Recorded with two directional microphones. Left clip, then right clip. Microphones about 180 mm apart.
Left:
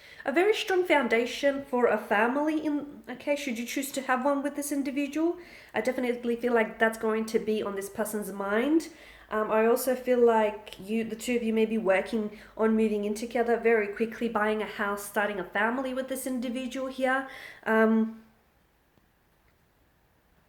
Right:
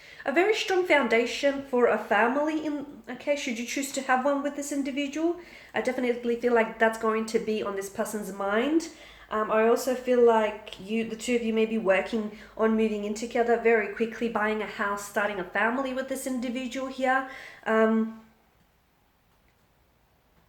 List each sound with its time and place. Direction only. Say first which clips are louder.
0.0 s speech: right 1 dB; 25° left (ahead or behind)